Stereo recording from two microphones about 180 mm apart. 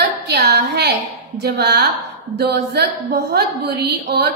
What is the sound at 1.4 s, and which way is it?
A woman's voice, 65° right (ahead or behind).